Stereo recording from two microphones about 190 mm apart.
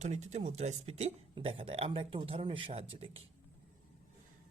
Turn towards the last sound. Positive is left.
turn(degrees=-30)  # may be behind; listen again after turning